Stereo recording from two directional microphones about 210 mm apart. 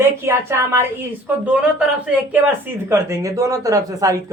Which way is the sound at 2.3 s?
10° right (ahead or behind).